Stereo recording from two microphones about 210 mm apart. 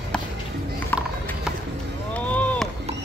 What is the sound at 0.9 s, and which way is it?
Music, 10° left (ahead or behind).